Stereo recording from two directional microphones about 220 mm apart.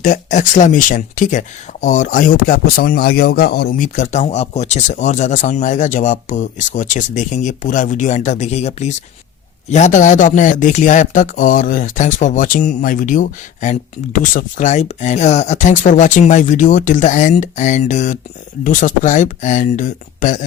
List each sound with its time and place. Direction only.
0.0 s speech: 35° left (ahead or behind)